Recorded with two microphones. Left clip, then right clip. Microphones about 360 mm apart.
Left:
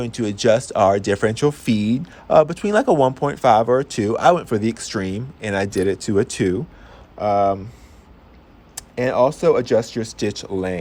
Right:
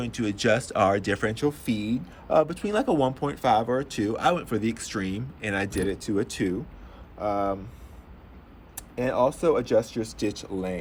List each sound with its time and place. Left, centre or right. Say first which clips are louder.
0.0 s speech: left 7 dB; centre
8.7 s speech: left 7 dB; left